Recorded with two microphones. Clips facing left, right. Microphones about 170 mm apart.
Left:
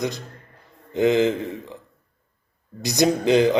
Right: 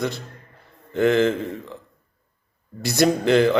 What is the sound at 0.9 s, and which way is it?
Speech, 15° left (ahead or behind).